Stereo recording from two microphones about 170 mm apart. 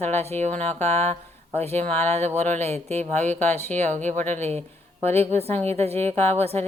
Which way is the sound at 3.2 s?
10° left (ahead or behind).